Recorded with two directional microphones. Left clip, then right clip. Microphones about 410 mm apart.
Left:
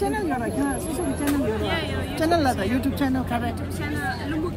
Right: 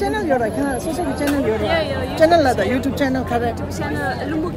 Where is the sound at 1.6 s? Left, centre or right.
Centre.